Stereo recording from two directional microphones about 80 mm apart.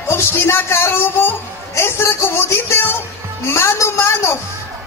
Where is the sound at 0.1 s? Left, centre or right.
Left.